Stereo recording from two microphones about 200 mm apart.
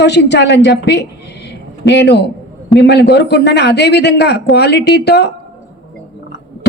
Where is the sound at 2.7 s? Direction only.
55° left (ahead or behind).